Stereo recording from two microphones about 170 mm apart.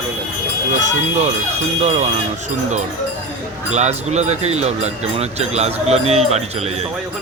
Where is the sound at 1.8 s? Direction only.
40° right (ahead or behind).